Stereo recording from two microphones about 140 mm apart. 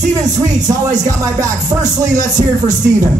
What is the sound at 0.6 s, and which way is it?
Music, 25° right (ahead or behind).